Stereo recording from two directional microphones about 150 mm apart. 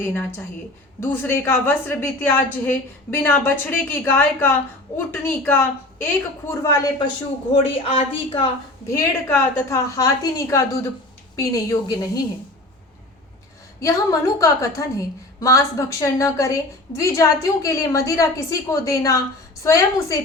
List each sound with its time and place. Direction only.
0.0 s a woman's voice: 10° left (ahead or behind)
7.5 s a woman's voice: 40° left (ahead or behind)
8.9 s a woman's voice: 20° left (ahead or behind)
13.7 s a woman's voice: 20° left (ahead or behind)